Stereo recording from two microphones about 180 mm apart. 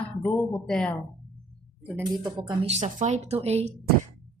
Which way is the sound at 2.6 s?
40° right (ahead or behind).